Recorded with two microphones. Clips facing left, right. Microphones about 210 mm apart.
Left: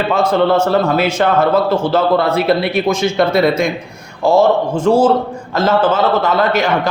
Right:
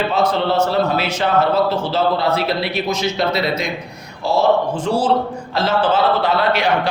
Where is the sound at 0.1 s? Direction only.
50° left (ahead or behind).